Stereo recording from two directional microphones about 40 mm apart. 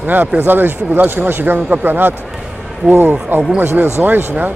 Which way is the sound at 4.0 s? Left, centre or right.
Centre.